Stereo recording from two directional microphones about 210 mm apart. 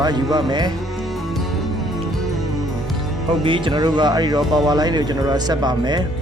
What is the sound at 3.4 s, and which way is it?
Speech, 25° right (ahead or behind).